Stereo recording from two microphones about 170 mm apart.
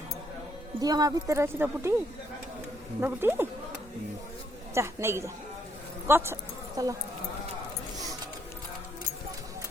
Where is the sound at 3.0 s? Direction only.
15° right (ahead or behind).